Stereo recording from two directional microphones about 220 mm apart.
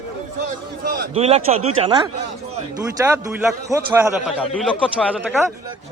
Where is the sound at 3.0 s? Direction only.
10° right (ahead or behind).